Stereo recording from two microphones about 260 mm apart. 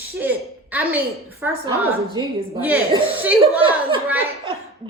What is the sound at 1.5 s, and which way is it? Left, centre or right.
Speech, centre.